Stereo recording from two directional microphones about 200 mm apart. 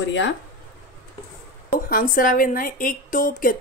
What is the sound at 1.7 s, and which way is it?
A woman's voice, 45° left (ahead or behind).